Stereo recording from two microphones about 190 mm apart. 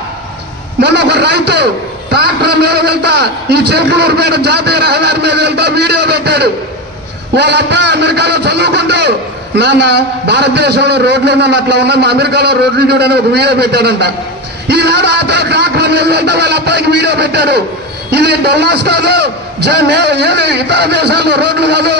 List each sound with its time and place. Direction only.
0.7 s a man's voice: 60° right (ahead or behind)